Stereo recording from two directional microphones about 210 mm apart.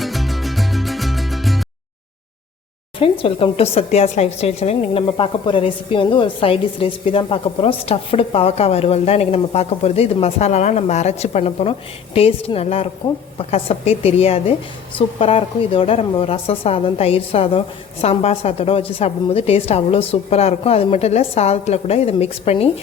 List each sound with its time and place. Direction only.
0.0 s music: centre (ahead or behind)
3.0 s speech: 25° left (ahead or behind)